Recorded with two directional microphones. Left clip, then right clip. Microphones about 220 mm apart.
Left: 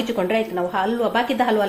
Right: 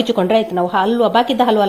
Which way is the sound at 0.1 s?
35° right (ahead or behind).